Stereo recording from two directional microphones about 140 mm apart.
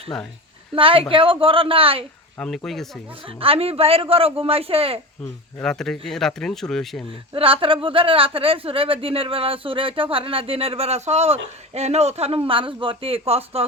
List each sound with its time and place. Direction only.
0.1 s speech: 5° left (ahead or behind)
0.8 s speech: 40° right (ahead or behind)
2.6 s speech: centre (ahead or behind)
3.2 s speech: 40° right (ahead or behind)
5.6 s speech: 5° left (ahead or behind)
7.3 s speech: 40° right (ahead or behind)